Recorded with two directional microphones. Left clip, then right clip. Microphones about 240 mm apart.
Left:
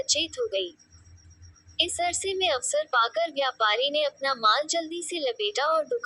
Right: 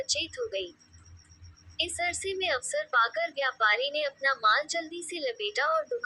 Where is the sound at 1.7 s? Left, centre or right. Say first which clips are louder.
Left 4 dB; left.